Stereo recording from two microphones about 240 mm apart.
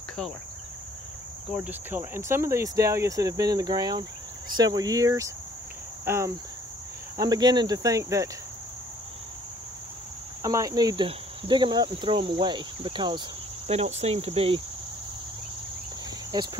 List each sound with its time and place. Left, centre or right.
1.6 s speech: centre
10.4 s speech: centre
16.3 s speech: centre